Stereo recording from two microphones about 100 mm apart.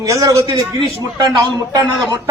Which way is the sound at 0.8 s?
45° right (ahead or behind).